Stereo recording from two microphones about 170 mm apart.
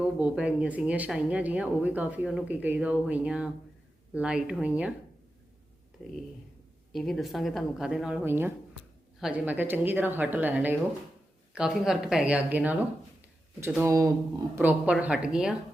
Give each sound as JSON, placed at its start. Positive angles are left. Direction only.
{"t": 0.0, "sound": "speech", "side_deg": -10}
{"t": 6.0, "sound": "speech", "side_deg": 5}